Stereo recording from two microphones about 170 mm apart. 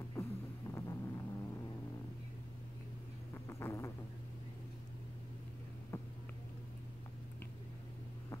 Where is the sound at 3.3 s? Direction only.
15° left (ahead or behind).